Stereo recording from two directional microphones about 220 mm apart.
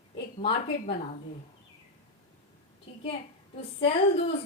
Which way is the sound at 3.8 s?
25° left (ahead or behind).